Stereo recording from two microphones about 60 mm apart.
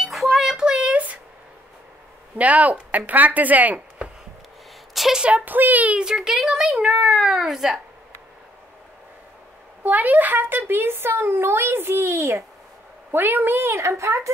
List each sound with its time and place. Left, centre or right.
0.0 s a sound: centre; by 1.2 s right
2.3 s speech: right
4.9 s a sound: centre
5.2 s speech: right
6.0 s speech: centre
9.8 s a child's voice: right
13.1 s a woman's voice: right